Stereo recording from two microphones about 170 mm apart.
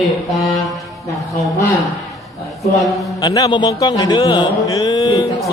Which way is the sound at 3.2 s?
25° left (ahead or behind).